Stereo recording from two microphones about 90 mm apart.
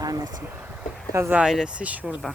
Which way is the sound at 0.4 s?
20° right (ahead or behind).